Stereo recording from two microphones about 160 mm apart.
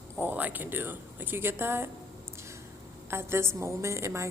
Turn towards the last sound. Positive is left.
turn(degrees=-20)  # may be behind; listen again after turning